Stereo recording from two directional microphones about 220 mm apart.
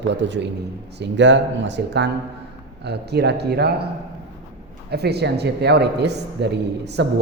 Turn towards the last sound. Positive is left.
turn(degrees=-50)  # may be behind; listen again after turning